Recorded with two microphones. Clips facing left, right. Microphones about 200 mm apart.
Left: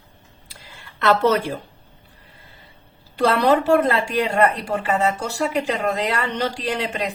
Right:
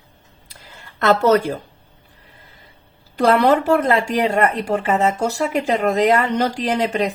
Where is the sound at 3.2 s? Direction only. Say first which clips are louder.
Right 2 dB; 45° right (ahead or behind).